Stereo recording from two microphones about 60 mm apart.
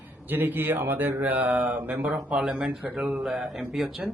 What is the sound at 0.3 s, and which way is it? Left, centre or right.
Mantra, right.